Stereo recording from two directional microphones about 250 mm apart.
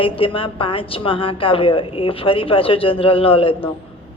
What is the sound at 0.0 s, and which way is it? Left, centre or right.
Speech, left.